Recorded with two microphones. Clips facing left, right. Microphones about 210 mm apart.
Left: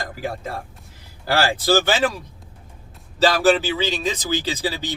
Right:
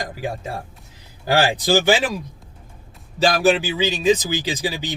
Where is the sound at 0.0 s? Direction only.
15° right (ahead or behind).